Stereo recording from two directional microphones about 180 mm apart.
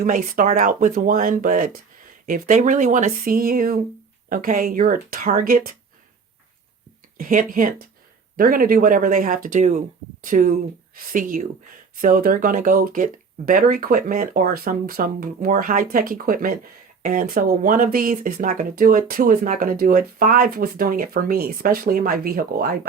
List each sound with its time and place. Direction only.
0.0 s speech: 50° right (ahead or behind)
7.2 s speech: 50° right (ahead or behind)